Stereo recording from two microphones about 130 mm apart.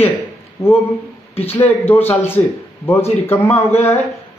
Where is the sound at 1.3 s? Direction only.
50° left (ahead or behind).